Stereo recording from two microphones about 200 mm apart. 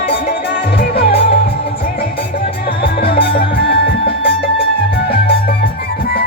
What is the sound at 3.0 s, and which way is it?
Music, 55° left (ahead or behind).